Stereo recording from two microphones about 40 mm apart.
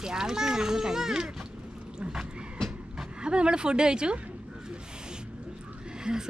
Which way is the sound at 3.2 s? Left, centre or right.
Right.